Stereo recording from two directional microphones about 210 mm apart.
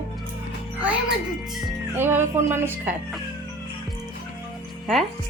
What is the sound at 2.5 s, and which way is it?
Speech, 10° right (ahead or behind).